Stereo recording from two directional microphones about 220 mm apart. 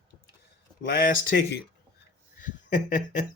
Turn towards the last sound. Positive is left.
turn(degrees=35)  # may be behind; listen again after turning